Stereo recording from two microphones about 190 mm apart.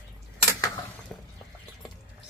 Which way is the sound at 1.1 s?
5° left (ahead or behind).